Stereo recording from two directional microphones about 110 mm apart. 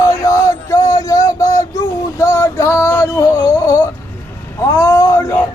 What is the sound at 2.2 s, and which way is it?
Male singing, 25° left (ahead or behind).